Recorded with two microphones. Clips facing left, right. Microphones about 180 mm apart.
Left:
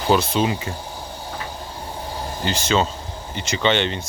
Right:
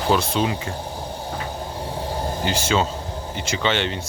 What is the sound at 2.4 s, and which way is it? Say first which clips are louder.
Speech: left 2 dB; 10° right (ahead or behind).